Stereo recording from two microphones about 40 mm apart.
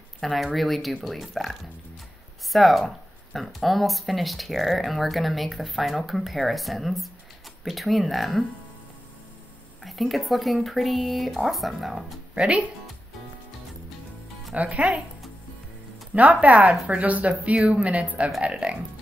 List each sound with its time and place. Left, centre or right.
0.2 s speech: centre
9.8 s speech: centre
12.4 s speech: right
14.5 s speech: right
16.2 s speech: right